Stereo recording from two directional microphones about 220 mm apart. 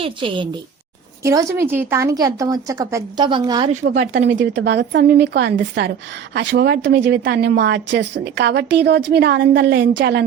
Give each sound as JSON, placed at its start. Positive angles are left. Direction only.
{"t": 0.0, "sound": "a woman's voice", "side_deg": -25}
{"t": 3.8, "sound": "a woman's voice", "side_deg": -50}